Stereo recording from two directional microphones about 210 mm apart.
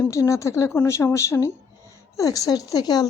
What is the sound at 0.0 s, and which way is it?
A woman's voice, 15° left (ahead or behind).